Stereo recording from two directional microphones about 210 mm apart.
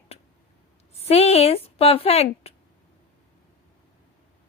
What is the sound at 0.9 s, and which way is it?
Speech, 30° left (ahead or behind).